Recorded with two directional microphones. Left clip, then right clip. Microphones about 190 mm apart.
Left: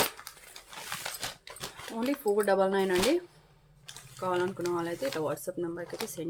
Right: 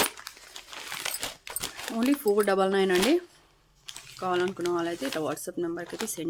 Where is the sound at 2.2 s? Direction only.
30° right (ahead or behind).